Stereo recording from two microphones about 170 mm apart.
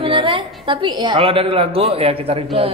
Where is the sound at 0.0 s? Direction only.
30° right (ahead or behind).